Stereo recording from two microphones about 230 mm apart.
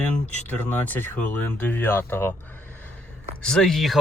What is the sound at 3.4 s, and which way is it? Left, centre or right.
Speech, centre.